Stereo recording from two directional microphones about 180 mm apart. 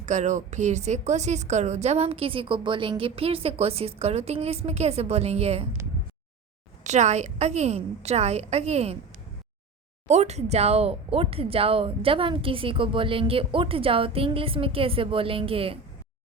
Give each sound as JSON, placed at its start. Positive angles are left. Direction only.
{"t": 0.0, "sound": "speech", "side_deg": -40}
{"t": 6.8, "sound": "speech", "side_deg": -40}
{"t": 10.1, "sound": "speech", "side_deg": -40}